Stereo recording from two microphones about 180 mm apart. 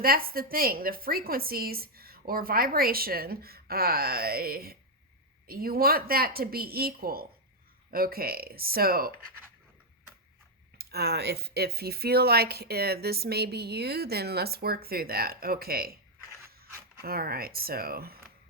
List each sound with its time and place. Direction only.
0.0 s speech: 55° right (ahead or behind)
10.8 s speech: 60° right (ahead or behind)
17.0 s speech: 55° right (ahead or behind)